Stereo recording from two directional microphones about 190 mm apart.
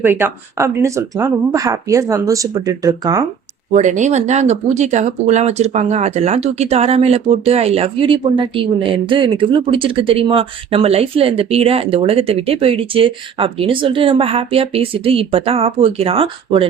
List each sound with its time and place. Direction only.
0.0 s speech: 10° right (ahead or behind)
3.7 s speech: 40° right (ahead or behind)